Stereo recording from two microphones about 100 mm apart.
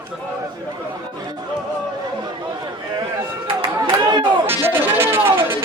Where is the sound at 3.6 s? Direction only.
55° right (ahead or behind).